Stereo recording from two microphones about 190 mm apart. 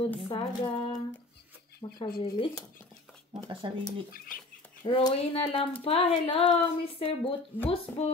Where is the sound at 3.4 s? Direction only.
25° right (ahead or behind).